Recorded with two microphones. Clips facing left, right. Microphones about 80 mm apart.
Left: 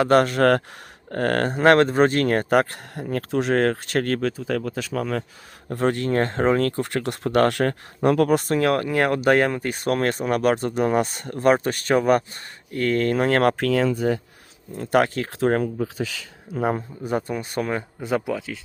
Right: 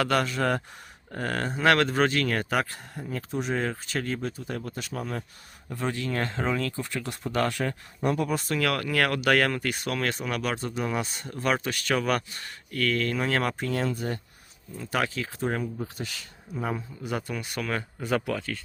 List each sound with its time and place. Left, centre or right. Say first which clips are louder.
0.1 s speech: left 9 dB; left
1.6 s speech: left 6 dB; left
5.7 s speech: left 8 dB; left
8.5 s speech: left 6 dB; left
11.4 s speech: left 8 dB; left
14.8 s speech: left 9 dB; left
17.7 s speech: even; centre